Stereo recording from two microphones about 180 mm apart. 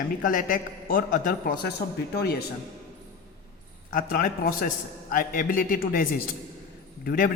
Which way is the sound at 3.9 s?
55° left (ahead or behind).